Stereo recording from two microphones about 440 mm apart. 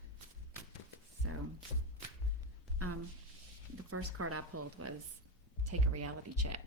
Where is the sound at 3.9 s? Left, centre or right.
Right.